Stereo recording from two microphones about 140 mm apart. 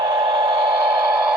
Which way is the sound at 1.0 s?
10° right (ahead or behind).